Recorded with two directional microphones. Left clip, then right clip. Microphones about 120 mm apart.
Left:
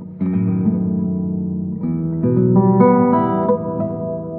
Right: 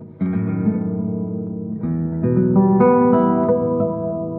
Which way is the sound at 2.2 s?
15° right (ahead or behind).